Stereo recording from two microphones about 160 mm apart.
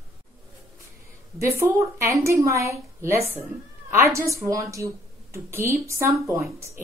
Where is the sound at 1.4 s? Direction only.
15° right (ahead or behind).